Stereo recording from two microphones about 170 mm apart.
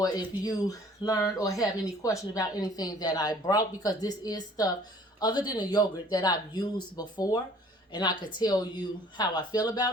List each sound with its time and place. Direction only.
0.0 s speech: 20° left (ahead or behind)